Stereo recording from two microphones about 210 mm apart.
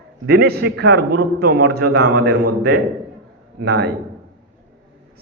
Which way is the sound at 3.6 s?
50° right (ahead or behind).